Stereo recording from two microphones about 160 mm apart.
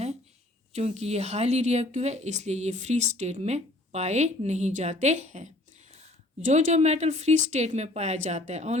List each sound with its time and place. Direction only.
0.7 s speech: 40° right (ahead or behind)